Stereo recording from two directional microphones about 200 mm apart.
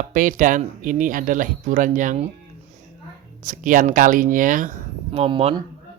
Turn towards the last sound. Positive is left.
turn(degrees=-30)  # may be behind; listen again after turning